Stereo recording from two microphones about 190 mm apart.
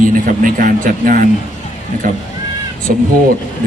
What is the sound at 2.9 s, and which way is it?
Speech, 50° right (ahead or behind).